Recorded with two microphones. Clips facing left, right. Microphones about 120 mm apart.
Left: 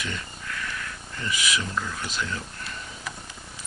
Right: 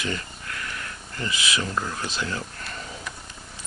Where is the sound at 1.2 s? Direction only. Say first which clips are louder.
Right 1 dB; 35° right (ahead or behind).